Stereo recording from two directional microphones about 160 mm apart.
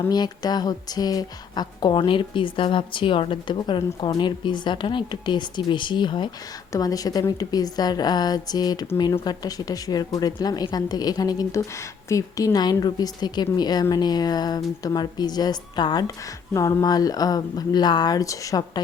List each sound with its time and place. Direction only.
0.1 s speech: 25° left (ahead or behind)